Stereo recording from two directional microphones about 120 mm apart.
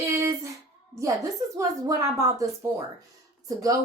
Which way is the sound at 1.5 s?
25° right (ahead or behind).